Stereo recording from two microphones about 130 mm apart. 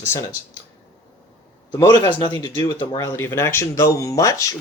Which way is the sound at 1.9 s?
35° left (ahead or behind).